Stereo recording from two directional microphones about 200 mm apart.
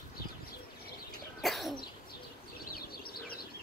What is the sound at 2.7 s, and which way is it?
Bird, 50° left (ahead or behind).